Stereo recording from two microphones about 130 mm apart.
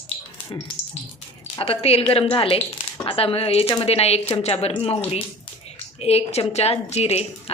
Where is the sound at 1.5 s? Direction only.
45° left (ahead or behind).